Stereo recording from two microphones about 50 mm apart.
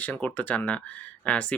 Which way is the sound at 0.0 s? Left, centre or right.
Left.